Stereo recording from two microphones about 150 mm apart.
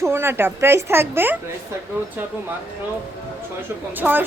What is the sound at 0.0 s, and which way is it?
A woman's voice, 15° right (ahead or behind).